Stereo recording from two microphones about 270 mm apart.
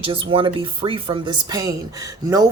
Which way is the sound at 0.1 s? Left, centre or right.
Centre.